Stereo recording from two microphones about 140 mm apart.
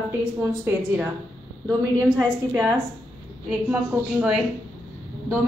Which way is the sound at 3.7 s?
10° right (ahead or behind).